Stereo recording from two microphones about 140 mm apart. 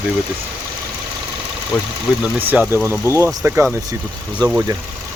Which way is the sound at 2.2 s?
10° right (ahead or behind).